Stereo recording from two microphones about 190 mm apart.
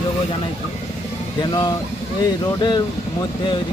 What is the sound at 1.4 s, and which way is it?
Speech, 20° left (ahead or behind).